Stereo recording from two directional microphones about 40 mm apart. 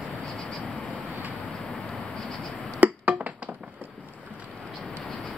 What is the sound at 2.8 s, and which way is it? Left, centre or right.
Music, right.